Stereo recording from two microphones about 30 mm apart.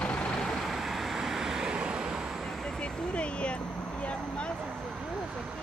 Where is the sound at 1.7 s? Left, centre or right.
Right.